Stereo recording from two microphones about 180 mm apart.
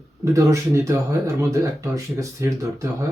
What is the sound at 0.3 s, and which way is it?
Speech, 15° right (ahead or behind).